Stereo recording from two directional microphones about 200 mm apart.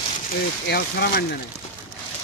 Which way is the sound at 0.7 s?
55° left (ahead or behind).